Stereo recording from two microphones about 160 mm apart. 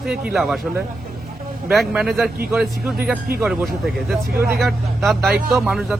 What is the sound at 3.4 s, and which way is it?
Speech, centre (ahead or behind).